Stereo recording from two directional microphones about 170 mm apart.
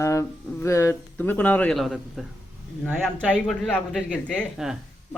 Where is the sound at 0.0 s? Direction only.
15° left (ahead or behind).